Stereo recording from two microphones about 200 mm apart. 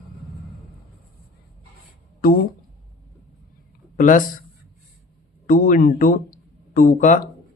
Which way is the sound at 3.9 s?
40° left (ahead or behind).